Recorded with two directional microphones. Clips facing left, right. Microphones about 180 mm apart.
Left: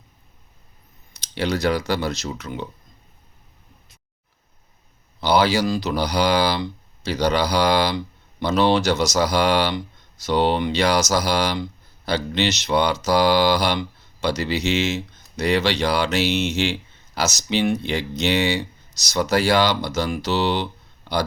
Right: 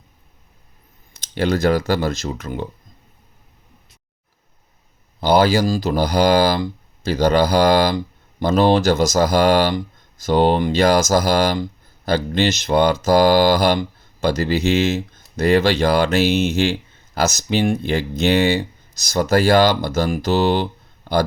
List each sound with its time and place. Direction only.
1.2 s speech: 50° right (ahead or behind)
5.2 s speech: 50° right (ahead or behind)